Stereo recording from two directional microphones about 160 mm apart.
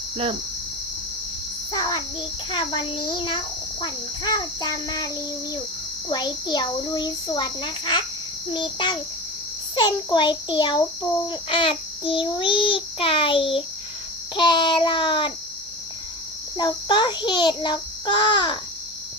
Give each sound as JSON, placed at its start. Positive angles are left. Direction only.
{"t": 2.5, "sound": "a child's voice", "side_deg": 30}
{"t": 6.1, "sound": "a child's voice", "side_deg": 25}
{"t": 11.3, "sound": "child singing", "side_deg": 35}
{"t": 14.3, "sound": "a child's voice", "side_deg": 30}
{"t": 16.6, "sound": "a child's voice", "side_deg": 30}